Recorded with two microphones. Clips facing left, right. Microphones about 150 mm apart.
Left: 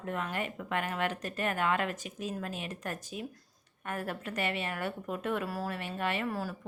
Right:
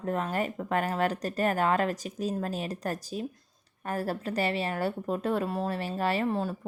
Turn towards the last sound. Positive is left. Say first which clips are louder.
# right 5 dB
turn(degrees=-25)  # may be behind; listen again after turning